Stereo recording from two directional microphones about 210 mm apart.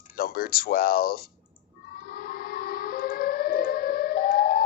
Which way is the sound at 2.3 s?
45° left (ahead or behind).